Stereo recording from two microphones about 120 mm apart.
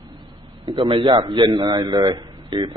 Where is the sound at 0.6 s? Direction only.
40° right (ahead or behind).